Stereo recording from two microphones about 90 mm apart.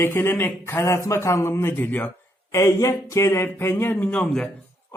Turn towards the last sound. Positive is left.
turn(degrees=10)  # may be behind; listen again after turning